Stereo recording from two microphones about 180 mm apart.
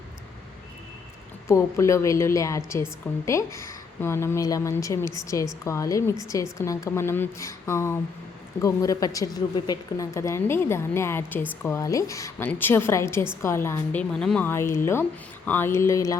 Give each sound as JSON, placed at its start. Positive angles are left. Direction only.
{"t": 1.5, "sound": "a woman's voice", "side_deg": 15}